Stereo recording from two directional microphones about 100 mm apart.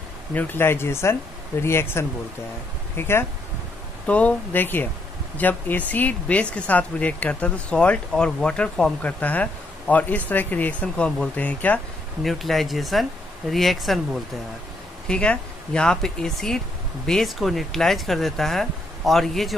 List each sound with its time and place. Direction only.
0.3 s speech: 20° left (ahead or behind)
4.0 s speech: 15° left (ahead or behind)
12.2 s speech: centre (ahead or behind)
15.0 s speech: 10° left (ahead or behind)